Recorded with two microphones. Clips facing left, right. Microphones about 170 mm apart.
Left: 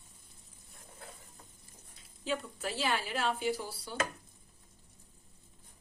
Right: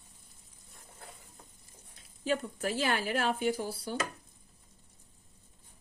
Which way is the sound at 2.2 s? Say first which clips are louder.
Right 4 dB; 50° right (ahead or behind).